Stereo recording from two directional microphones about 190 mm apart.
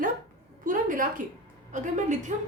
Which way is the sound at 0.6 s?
45° right (ahead or behind).